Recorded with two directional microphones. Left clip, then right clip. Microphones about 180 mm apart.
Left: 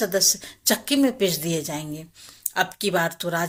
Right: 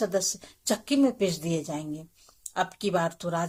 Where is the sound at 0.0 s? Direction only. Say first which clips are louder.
Left 6 dB; 15° left (ahead or behind).